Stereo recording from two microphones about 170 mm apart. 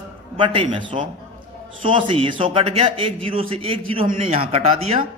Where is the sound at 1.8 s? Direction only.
30° right (ahead or behind).